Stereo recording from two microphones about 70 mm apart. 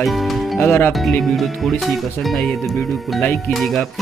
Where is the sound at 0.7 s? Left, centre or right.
Left.